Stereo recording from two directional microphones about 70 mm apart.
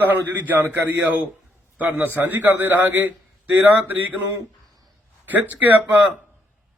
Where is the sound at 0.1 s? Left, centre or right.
Right.